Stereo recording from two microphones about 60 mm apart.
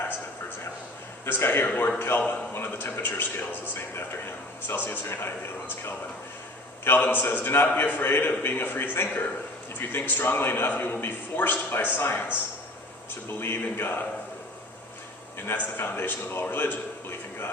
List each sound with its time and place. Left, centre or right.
1.2 s a man's voice: left
13.4 s a man's voice: left
15.4 s a man's voice: left